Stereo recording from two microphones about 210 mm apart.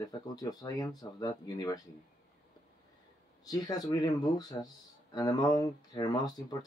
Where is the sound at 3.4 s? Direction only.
20° left (ahead or behind).